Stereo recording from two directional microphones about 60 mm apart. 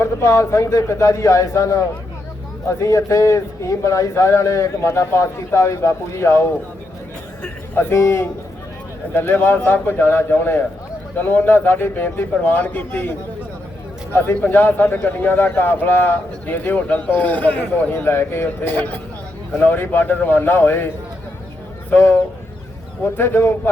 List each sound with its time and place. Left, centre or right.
0.0 s a man's voice: left
2.8 s a man's voice: left
7.9 s a man's voice: left
23.1 s a man's voice: left